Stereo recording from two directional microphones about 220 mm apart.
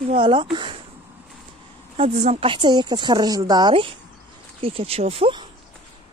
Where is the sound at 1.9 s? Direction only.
30° right (ahead or behind).